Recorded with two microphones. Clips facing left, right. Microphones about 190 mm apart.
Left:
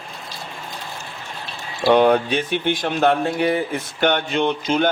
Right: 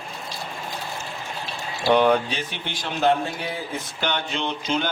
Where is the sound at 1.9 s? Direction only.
55° left (ahead or behind).